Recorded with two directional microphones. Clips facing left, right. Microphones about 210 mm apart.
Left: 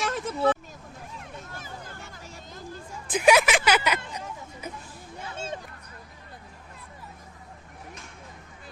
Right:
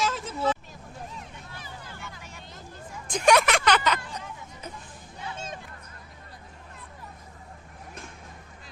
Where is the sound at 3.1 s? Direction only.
5° left (ahead or behind).